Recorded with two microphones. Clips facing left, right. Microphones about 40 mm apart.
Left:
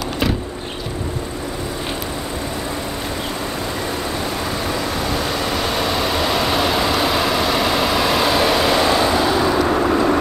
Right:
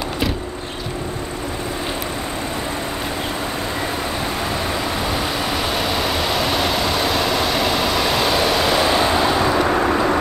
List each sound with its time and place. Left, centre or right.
5.0 s vehicle: centre